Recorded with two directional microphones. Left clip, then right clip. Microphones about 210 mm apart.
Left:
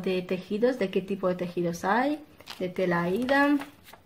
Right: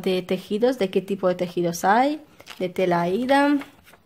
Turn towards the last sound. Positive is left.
turn(degrees=-45)  # may be behind; listen again after turning